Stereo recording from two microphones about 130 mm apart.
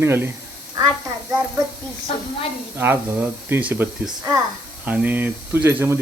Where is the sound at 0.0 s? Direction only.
20° right (ahead or behind).